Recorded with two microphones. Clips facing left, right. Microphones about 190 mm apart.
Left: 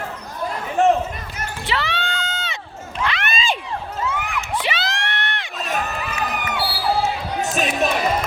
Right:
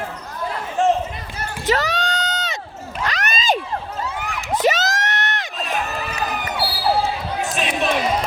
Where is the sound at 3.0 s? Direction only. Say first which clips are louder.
Even; 40° right (ahead or behind).